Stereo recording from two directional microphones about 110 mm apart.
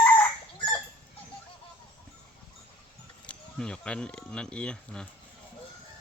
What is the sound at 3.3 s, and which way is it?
Speech, 10° left (ahead or behind).